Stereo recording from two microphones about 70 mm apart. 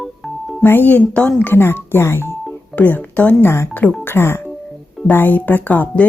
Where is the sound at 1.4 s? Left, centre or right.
Left.